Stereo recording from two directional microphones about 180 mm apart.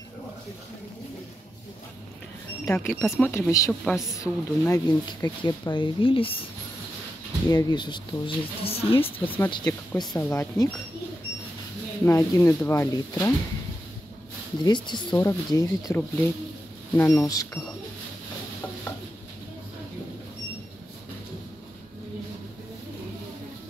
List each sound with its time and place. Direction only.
2.6 s speech: 15° left (ahead or behind)
3.8 s a woman's voice: centre (ahead or behind)
4.2 s speech: 20° left (ahead or behind)
7.4 s a woman's voice: 20° left (ahead or behind)
9.2 s speech: 10° left (ahead or behind)
9.5 s speech: 25° left (ahead or behind)
12.0 s speech: 15° left (ahead or behind)
14.6 s speech: 25° left (ahead or behind)